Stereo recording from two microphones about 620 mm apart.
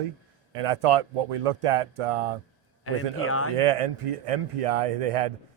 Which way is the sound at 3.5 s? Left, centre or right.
Right.